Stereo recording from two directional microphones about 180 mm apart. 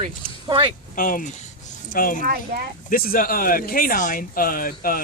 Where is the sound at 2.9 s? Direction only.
55° left (ahead or behind).